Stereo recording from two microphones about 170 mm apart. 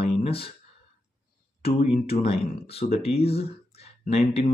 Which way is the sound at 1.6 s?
35° left (ahead or behind).